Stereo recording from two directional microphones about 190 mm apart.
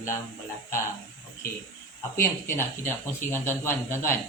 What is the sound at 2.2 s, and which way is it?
Speech, 15° left (ahead or behind).